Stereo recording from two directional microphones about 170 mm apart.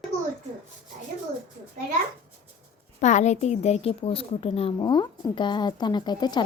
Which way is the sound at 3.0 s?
45° left (ahead or behind).